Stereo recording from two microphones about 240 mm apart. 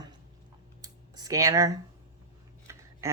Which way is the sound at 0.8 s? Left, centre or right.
Centre.